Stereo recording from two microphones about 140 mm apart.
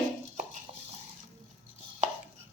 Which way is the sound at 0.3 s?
65° right (ahead or behind).